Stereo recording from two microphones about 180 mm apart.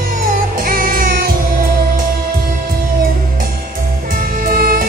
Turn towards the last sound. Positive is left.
turn(degrees=-55)  # may be behind; listen again after turning